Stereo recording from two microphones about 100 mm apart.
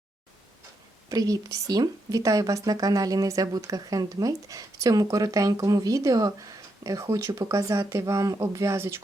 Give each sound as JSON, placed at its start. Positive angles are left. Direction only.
{"t": 1.1, "sound": "a woman's voice", "side_deg": -35}